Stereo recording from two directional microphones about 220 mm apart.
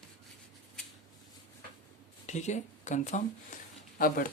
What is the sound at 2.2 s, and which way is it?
Speech, 30° left (ahead or behind).